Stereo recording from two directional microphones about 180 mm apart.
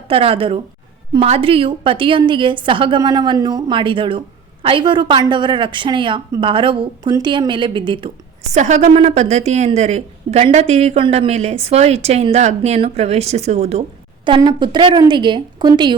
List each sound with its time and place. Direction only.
0.1 s a woman's voice: 30° right (ahead or behind)
8.5 s a woman's voice: 40° right (ahead or behind)
14.3 s a woman's voice: 25° right (ahead or behind)